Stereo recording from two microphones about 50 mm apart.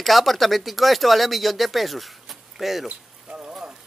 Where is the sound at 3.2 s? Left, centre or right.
Centre.